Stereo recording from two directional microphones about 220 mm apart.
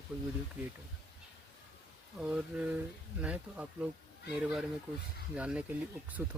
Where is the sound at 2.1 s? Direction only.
5° right (ahead or behind).